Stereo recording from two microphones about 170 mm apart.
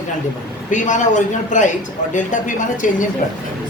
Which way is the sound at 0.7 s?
45° left (ahead or behind).